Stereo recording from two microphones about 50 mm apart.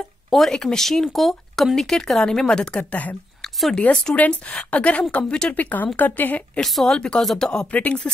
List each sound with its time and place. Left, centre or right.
0.3 s speech: centre
2.8 s a woman's voice: left
6.6 s speech: centre
7.7 s speech: left